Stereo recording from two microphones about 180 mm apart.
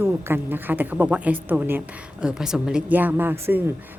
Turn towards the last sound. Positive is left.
turn(degrees=-10)  # may be behind; listen again after turning